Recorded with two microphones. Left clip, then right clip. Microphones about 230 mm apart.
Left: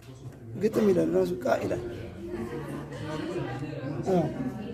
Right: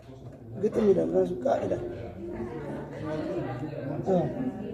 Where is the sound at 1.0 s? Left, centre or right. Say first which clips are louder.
Even; left.